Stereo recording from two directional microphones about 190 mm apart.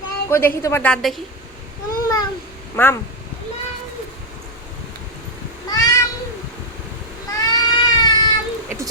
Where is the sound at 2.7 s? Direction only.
10° left (ahead or behind).